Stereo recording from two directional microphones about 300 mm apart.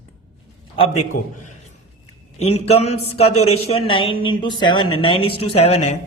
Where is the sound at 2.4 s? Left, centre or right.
Left.